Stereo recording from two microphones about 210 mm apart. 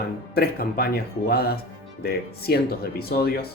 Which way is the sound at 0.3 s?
45° left (ahead or behind).